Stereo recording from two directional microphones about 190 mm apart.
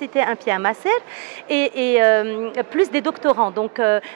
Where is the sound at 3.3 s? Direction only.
25° right (ahead or behind).